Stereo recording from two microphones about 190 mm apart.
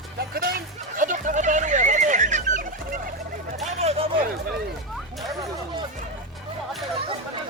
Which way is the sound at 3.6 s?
35° right (ahead or behind).